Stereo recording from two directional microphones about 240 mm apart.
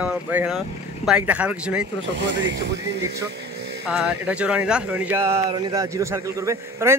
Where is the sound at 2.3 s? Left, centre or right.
Right.